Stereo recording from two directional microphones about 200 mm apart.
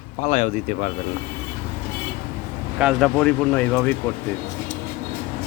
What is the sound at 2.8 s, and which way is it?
Speech, centre (ahead or behind).